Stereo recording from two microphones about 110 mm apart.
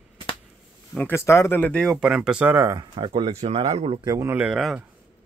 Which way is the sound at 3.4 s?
75° right (ahead or behind).